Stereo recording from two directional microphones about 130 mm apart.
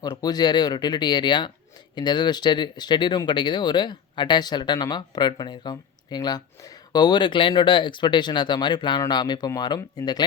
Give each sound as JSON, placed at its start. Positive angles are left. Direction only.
{"t": 0.0, "sound": "speech", "side_deg": 30}